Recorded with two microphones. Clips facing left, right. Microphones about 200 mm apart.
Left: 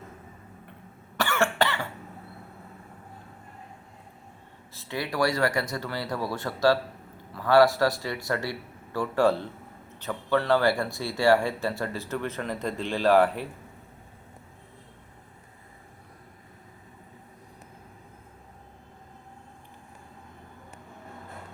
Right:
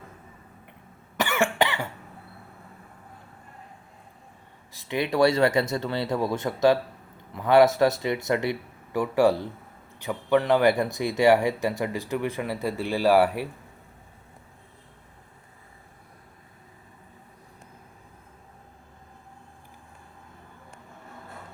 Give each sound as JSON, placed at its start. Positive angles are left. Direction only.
{"t": 1.1, "sound": "cough", "side_deg": -15}
{"t": 4.7, "sound": "speech", "side_deg": -15}